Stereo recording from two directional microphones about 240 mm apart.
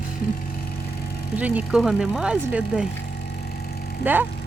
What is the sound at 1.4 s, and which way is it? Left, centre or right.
Speech, centre.